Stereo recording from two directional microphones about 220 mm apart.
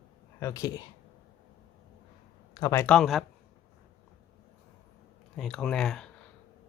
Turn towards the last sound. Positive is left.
turn(degrees=0)  # may be behind; listen again after turning